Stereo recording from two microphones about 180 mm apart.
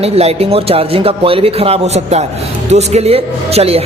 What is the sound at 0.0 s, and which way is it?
A man's voice, 35° right (ahead or behind).